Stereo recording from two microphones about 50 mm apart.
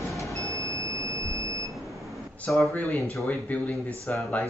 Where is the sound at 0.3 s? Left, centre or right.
Right.